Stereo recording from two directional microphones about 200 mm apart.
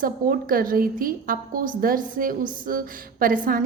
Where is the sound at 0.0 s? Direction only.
45° right (ahead or behind).